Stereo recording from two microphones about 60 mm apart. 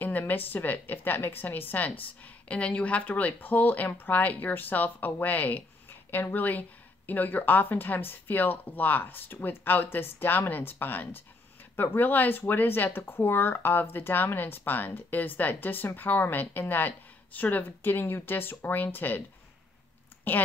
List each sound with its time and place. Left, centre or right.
0.0 s a woman's voice: left
20.3 s speech: left